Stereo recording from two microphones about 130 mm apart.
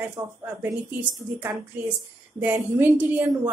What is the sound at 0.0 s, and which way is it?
Speech, 15° right (ahead or behind).